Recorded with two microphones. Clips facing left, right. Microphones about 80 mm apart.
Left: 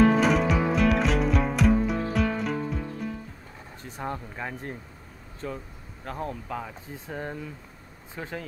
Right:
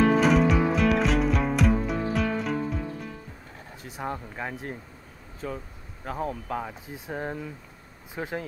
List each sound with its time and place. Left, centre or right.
0.0 s music: centre
3.8 s speech: centre